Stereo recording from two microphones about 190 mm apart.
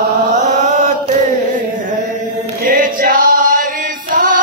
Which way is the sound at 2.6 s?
45° right (ahead or behind).